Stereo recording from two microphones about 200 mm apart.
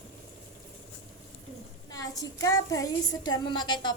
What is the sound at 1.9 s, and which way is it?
A woman's voice, 15° left (ahead or behind).